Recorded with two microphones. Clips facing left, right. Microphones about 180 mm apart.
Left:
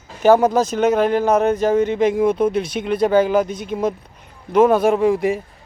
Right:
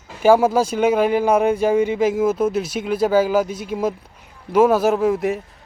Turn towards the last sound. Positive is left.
turn(degrees=0)  # may be behind; listen again after turning